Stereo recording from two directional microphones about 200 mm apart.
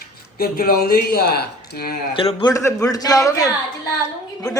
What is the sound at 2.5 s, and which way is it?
A man's voice, 15° left (ahead or behind).